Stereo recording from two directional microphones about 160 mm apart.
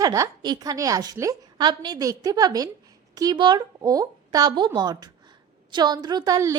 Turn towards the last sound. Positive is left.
turn(degrees=-20)  # may be behind; listen again after turning